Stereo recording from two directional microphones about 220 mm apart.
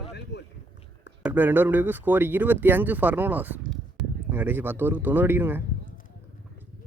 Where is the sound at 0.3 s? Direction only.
55° left (ahead or behind).